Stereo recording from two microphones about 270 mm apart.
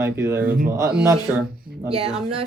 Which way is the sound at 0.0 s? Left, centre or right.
Centre.